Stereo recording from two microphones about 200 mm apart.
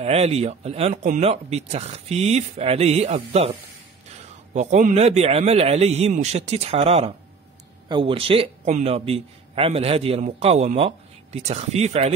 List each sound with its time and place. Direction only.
0.0 s a man's voice: 30° right (ahead or behind)
4.6 s a man's voice: 40° right (ahead or behind)